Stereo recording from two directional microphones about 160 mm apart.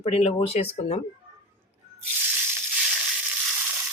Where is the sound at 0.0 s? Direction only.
40° left (ahead or behind).